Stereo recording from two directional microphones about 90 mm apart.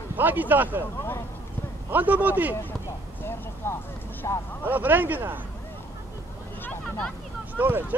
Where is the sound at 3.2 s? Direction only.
25° left (ahead or behind).